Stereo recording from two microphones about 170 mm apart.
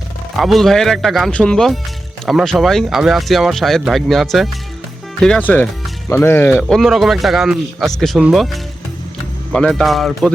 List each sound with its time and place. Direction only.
0.3 s speech: centre (ahead or behind)
6.7 s speech: centre (ahead or behind)
9.5 s speech: 5° left (ahead or behind)